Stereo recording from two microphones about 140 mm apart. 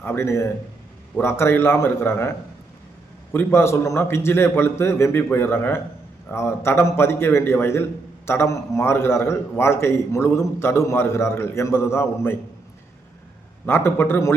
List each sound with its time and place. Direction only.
0.0 s a man's voice: 15° left (ahead or behind)
3.3 s a man's voice: 20° left (ahead or behind)
13.7 s a man's voice: 15° left (ahead or behind)